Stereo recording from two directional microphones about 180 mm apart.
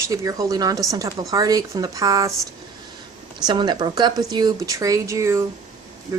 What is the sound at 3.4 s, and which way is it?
Speech, 25° right (ahead or behind).